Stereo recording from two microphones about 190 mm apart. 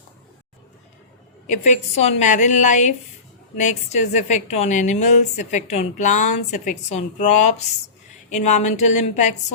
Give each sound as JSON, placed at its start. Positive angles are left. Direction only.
{"t": 1.5, "sound": "a woman's voice", "side_deg": 40}